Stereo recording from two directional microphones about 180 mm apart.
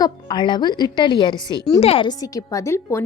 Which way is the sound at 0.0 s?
25° left (ahead or behind).